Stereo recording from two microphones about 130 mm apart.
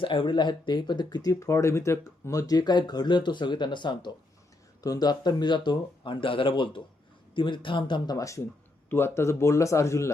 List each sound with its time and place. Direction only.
0.0 s speech: 40° left (ahead or behind); by 10.1 s 20° left (ahead or behind)